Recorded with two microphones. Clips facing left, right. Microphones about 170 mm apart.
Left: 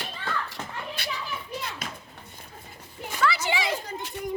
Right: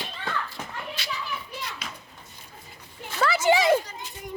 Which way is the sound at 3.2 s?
45° right (ahead or behind).